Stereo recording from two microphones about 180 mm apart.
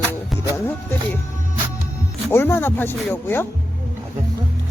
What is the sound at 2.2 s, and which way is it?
Speech, 10° left (ahead or behind).